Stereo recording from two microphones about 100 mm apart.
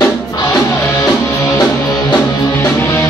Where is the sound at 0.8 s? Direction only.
30° left (ahead or behind).